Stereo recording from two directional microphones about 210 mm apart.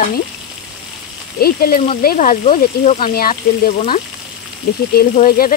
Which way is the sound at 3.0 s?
45° left (ahead or behind).